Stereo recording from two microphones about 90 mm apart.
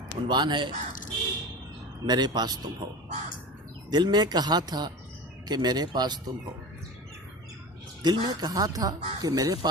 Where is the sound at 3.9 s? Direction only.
55° right (ahead or behind).